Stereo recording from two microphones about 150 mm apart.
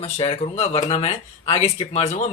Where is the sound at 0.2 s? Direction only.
40° left (ahead or behind).